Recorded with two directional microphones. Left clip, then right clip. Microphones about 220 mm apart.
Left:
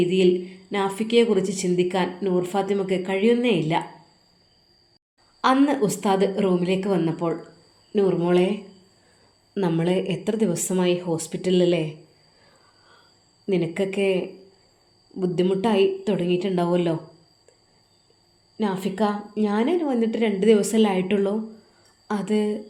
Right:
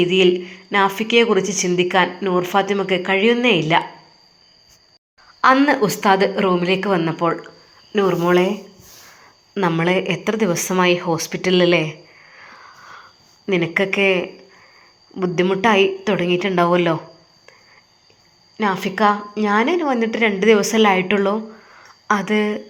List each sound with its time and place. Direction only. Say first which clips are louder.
0.0 s a woman's voice: right 5 dB; centre (ahead or behind)
5.4 s a woman's voice: right 6 dB; centre (ahead or behind)
13.5 s a woman's voice: right 6 dB; centre (ahead or behind)
18.5 s a woman's voice: right 6 dB; 5° left (ahead or behind)